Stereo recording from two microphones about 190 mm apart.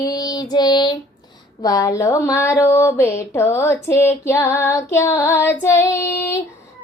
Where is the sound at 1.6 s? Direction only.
15° left (ahead or behind).